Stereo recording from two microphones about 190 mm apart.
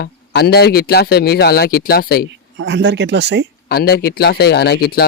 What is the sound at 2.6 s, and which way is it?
Speech, 70° right (ahead or behind).